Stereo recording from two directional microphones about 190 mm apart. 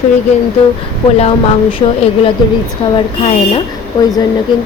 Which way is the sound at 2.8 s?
25° left (ahead or behind).